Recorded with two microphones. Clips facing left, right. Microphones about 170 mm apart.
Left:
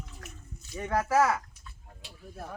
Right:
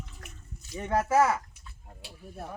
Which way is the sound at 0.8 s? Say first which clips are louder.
Right 1 dB; 20° right (ahead or behind).